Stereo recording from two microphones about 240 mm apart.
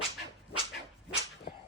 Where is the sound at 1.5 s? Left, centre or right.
Left.